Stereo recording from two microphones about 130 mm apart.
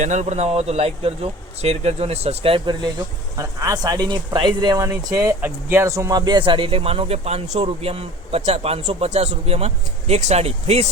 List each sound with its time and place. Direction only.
0.0 s speech: 65° right (ahead or behind); by 2.9 s 40° right (ahead or behind)
3.3 s speech: 25° right (ahead or behind)
4.9 s speech: 20° right (ahead or behind); by 10.8 s 55° right (ahead or behind)